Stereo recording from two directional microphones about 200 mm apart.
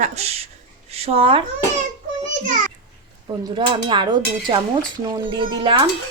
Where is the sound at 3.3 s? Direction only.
25° right (ahead or behind).